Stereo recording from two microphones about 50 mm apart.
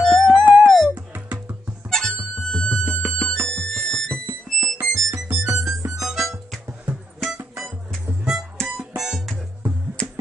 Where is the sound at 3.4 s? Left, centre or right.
Left.